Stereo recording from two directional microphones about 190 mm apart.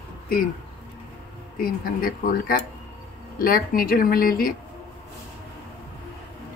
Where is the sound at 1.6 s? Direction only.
50° left (ahead or behind).